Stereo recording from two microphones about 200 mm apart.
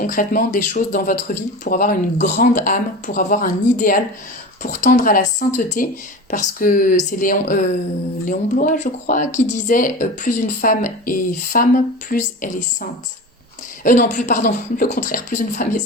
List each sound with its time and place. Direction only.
0.0 s speech: 45° left (ahead or behind)